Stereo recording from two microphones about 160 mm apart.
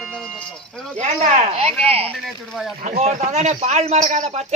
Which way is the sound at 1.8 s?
35° right (ahead or behind).